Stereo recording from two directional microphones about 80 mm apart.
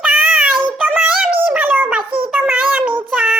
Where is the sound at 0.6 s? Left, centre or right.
Centre.